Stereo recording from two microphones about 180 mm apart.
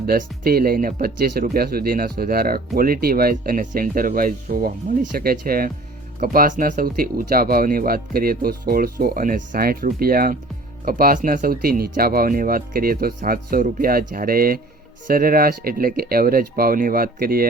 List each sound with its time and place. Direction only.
0.0 s speech: 55° right (ahead or behind)